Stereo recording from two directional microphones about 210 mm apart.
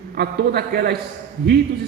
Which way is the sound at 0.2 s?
50° right (ahead or behind).